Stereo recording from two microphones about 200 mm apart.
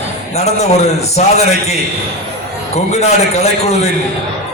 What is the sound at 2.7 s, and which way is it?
A man's voice, 35° left (ahead or behind).